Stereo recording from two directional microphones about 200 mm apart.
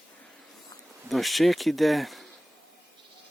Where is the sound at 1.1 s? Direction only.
Centre (ahead or behind).